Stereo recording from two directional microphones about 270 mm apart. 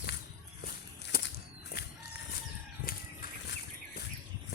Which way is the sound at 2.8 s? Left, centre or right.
Left.